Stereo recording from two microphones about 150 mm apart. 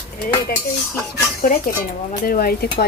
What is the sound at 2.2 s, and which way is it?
Speech, 85° left.